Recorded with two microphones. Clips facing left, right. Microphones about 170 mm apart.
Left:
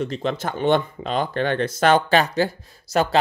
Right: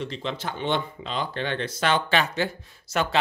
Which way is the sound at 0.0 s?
45° left (ahead or behind).